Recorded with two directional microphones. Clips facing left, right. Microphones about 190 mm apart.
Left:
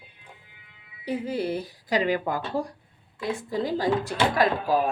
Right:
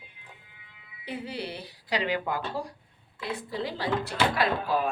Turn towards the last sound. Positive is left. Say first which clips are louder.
# left 4 dB
turn(degrees=45)  # may be behind; listen again after turning